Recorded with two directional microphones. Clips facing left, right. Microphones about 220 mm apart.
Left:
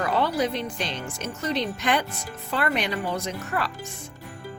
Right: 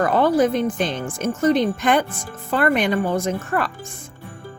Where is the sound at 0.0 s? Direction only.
50° right (ahead or behind).